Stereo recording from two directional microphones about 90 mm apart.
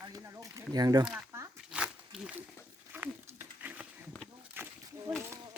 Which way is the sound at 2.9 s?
20° right (ahead or behind).